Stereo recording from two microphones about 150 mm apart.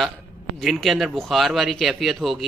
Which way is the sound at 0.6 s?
Centre (ahead or behind).